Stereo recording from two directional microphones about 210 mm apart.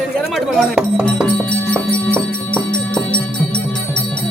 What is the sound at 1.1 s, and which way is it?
Music, 5° left (ahead or behind).